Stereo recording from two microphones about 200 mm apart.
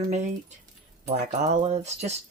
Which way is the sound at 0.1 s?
35° right (ahead or behind).